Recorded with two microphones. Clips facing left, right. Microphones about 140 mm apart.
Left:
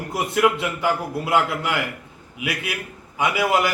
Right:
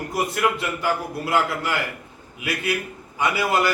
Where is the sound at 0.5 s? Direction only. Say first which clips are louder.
Left 2 dB; 20° left (ahead or behind).